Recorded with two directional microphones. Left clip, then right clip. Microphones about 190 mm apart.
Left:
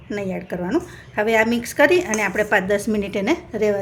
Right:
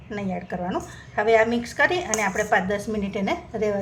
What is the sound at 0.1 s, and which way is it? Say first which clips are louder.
A woman's voice: left 4 dB; 50° left (ahead or behind).